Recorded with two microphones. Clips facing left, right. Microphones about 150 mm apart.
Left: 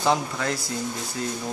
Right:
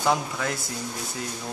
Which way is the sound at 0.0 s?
5° right (ahead or behind).